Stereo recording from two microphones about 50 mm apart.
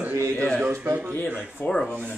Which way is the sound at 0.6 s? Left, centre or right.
Right.